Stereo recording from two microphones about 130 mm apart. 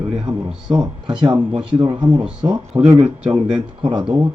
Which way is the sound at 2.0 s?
10° right (ahead or behind).